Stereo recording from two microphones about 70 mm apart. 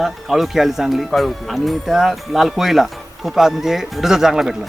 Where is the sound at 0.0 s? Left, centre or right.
Centre.